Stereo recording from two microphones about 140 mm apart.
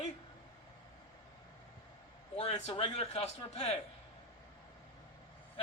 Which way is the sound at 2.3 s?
45° left (ahead or behind).